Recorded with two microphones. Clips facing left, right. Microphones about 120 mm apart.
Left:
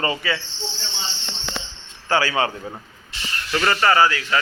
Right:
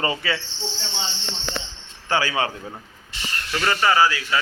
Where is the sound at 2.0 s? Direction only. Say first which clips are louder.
Left 2 dB; 15° right (ahead or behind).